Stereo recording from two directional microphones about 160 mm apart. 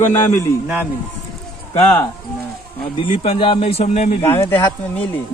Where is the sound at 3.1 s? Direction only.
40° left (ahead or behind).